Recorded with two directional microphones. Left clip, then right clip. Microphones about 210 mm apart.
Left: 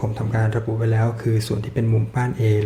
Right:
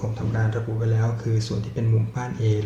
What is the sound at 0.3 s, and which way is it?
Speech, 40° left (ahead or behind).